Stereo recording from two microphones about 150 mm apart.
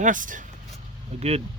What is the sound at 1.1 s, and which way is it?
Speech, 45° right (ahead or behind).